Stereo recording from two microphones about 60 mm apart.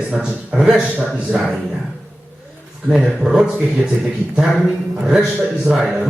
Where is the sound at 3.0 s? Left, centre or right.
Centre.